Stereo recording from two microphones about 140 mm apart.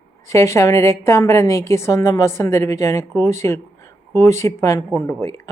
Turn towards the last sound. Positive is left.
turn(degrees=15)  # may be behind; listen again after turning